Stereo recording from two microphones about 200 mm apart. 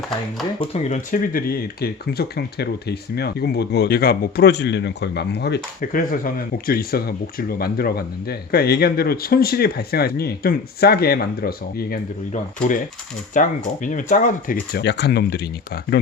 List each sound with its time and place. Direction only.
0.6 s speech: 35° left (ahead or behind); by 16.0 s 55° left (ahead or behind)